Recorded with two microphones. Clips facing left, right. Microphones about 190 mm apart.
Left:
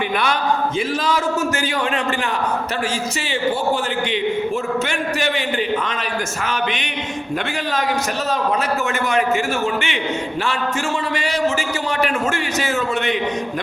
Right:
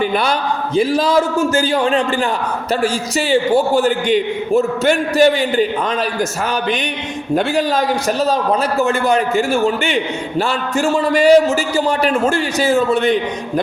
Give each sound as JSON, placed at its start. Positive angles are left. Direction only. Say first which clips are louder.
{"t": 0.8, "sound": "a man's voice", "louder": "right 7 dB", "side_deg": -35}
{"t": 7.3, "sound": "a man's voice", "louder": "right 8 dB", "side_deg": -35}